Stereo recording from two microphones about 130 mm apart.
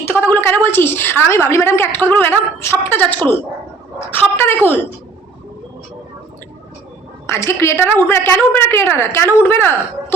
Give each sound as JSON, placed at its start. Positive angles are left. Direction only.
{"t": 0.1, "sound": "a woman's voice", "side_deg": 15}
{"t": 7.3, "sound": "a woman's voice", "side_deg": 20}